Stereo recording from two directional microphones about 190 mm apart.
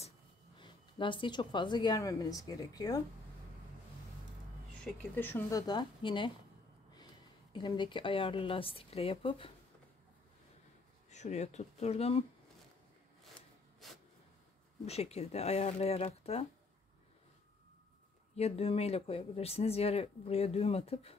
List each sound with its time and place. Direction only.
0.6 s speech: 25° left (ahead or behind)
4.8 s a woman's voice: 10° left (ahead or behind); by 9.5 s 30° left (ahead or behind)
11.1 s speech: 35° left (ahead or behind)
14.9 s speech: 35° left (ahead or behind)
18.3 s speech: 30° left (ahead or behind)